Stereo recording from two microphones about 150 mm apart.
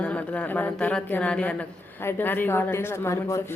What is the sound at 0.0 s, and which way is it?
A woman's voice, 10° left (ahead or behind).